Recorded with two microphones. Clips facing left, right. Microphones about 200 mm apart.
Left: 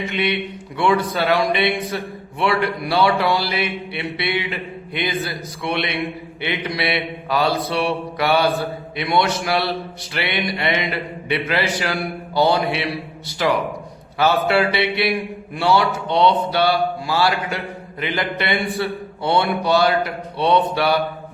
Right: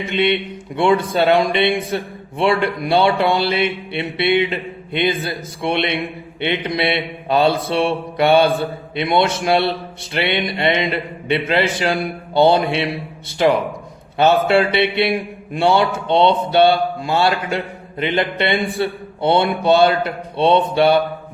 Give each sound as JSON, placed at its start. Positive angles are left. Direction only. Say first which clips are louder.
{"t": 0.1, "sound": "mantra", "louder": "right 9 dB", "side_deg": -25}